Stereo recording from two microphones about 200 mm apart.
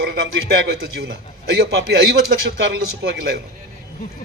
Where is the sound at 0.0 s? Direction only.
55° right (ahead or behind).